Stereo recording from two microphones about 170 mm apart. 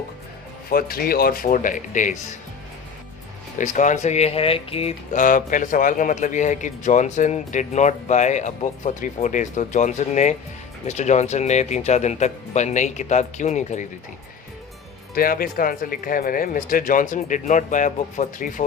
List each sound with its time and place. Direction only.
0.7 s speech: 60° left (ahead or behind)
3.6 s speech: 45° left (ahead or behind)
15.1 s speech: 60° left (ahead or behind)